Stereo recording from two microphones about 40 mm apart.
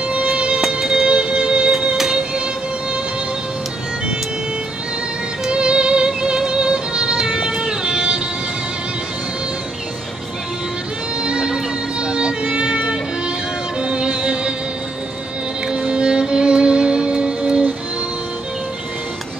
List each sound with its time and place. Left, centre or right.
0.1 s music: right
5.5 s music: right
7.2 s music: centre
11.2 s music: right
15.7 s music: right